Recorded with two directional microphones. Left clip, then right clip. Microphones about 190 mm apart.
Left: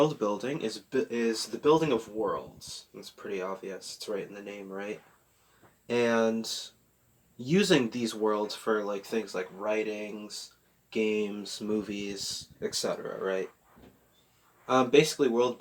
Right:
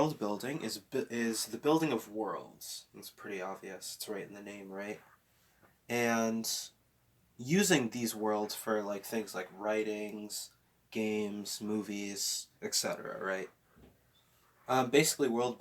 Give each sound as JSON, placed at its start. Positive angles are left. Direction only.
{"t": 0.1, "sound": "speech", "side_deg": -35}
{"t": 3.0, "sound": "speech", "side_deg": -40}
{"t": 14.7, "sound": "speech", "side_deg": -35}